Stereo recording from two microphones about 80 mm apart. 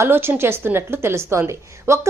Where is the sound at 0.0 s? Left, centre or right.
Right.